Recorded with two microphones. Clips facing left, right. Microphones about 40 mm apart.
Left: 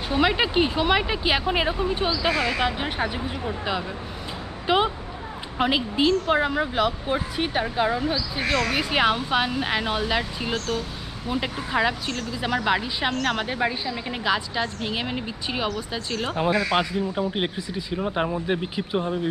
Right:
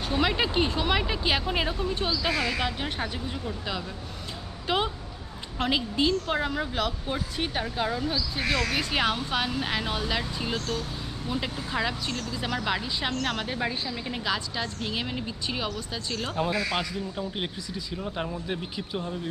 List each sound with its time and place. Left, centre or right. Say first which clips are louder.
0.1 s speech: left 4 dB; centre
4.6 s a sound: left 6 dB; centre
5.6 s speech: left 4 dB; centre